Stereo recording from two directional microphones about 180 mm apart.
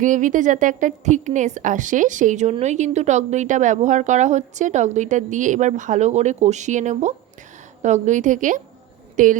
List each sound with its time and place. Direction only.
0.0 s a woman's voice: 45° right (ahead or behind)